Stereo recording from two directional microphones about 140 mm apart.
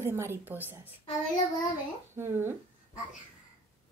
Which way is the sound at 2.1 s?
15° right (ahead or behind).